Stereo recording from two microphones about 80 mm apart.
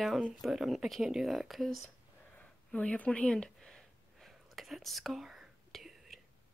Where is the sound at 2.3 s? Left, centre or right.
Centre.